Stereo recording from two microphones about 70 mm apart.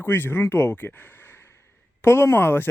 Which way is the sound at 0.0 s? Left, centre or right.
Left.